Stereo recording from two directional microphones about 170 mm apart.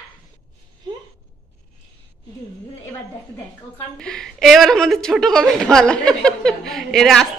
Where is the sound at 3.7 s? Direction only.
5° left (ahead or behind).